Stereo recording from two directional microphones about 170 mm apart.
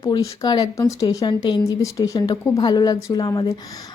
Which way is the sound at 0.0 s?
20° left (ahead or behind).